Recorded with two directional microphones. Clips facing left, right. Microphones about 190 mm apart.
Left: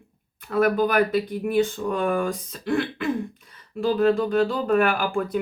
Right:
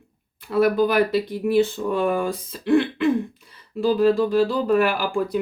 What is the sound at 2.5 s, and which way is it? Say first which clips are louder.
Speech: right 6 dB; 45° left (ahead or behind).